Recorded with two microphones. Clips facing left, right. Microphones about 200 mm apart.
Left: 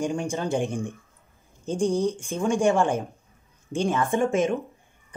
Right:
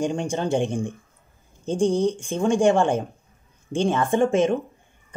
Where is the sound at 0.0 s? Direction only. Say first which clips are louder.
Right 2 dB; 30° right (ahead or behind).